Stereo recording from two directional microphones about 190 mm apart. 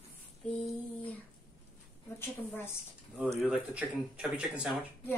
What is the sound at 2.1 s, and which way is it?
Speech, 10° left (ahead or behind).